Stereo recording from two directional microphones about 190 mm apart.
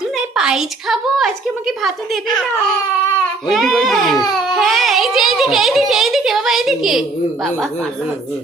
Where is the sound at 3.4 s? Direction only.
Centre (ahead or behind).